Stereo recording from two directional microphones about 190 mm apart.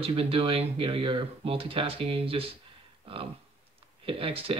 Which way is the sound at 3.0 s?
30° right (ahead or behind).